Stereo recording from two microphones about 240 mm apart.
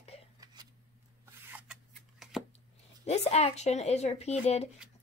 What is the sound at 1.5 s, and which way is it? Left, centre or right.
Rub, centre.